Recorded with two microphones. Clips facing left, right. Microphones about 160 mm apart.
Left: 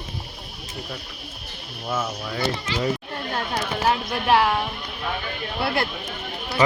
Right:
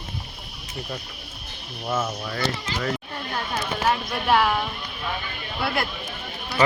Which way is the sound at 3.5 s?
25° left (ahead or behind).